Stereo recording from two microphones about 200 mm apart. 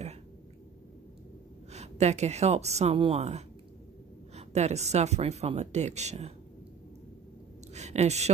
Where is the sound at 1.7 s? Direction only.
35° right (ahead or behind).